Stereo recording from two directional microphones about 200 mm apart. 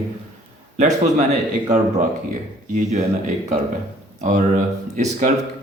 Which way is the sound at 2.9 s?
35° right (ahead or behind).